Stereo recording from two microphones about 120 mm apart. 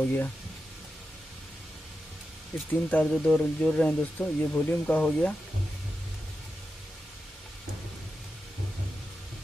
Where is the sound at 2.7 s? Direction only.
10° left (ahead or behind).